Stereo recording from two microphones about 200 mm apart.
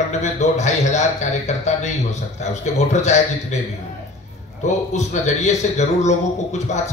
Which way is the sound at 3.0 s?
35° left (ahead or behind).